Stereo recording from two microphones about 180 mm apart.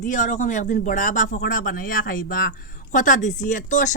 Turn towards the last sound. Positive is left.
turn(degrees=45)  # may be behind; listen again after turning